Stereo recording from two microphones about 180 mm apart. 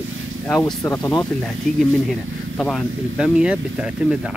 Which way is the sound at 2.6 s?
Centre (ahead or behind).